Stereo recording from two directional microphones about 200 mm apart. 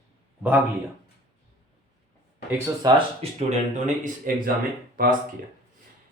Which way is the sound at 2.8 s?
25° right (ahead or behind).